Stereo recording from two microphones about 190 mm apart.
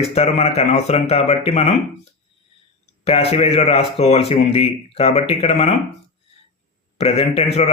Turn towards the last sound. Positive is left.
turn(degrees=30)  # may be behind; listen again after turning